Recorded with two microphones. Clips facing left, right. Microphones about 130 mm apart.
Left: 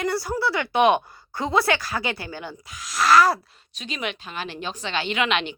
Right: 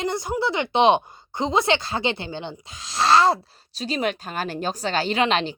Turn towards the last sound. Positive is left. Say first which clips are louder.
# right 3 dB
turn(degrees=-35)  # may be behind; listen again after turning